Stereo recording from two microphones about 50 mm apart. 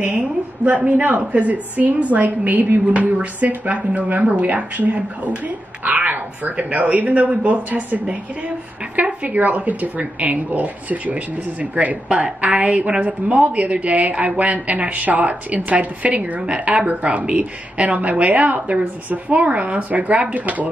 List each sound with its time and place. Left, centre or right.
0.0 s a woman's voice: right